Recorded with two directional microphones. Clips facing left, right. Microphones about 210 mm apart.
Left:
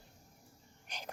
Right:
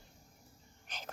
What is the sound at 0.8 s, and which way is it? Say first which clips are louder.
Wheeze: left 1 dB; 15° left (ahead or behind).